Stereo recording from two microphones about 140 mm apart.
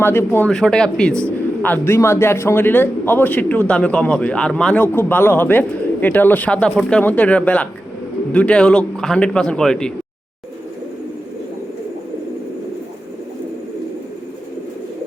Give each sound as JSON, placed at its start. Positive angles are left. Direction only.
{"t": 0.0, "sound": "a man's voice", "side_deg": 15}
{"t": 1.6, "sound": "a man's voice", "side_deg": 15}